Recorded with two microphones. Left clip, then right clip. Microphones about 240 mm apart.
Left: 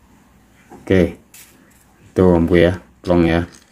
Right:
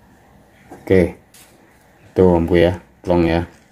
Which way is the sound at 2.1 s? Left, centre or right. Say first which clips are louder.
Even; centre.